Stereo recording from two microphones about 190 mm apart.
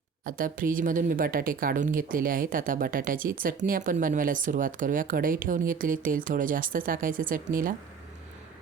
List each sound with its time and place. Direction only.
0.3 s speech: 45° right (ahead or behind)